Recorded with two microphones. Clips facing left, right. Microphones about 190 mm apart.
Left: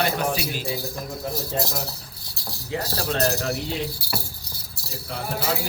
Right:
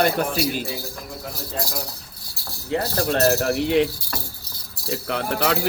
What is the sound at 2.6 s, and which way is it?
Speech, 55° right (ahead or behind).